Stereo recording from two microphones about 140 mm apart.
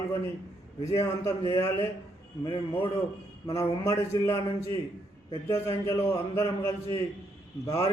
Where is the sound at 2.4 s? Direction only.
35° left (ahead or behind).